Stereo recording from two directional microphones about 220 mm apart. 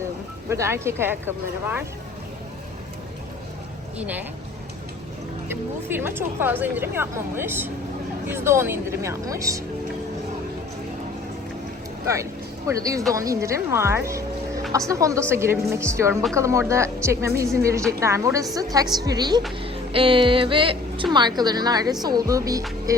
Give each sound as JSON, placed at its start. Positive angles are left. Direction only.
{"t": 0.5, "sound": "speech", "side_deg": -10}
{"t": 3.9, "sound": "speech", "side_deg": -5}
{"t": 5.5, "sound": "speech", "side_deg": -10}
{"t": 12.0, "sound": "a woman's voice", "side_deg": -15}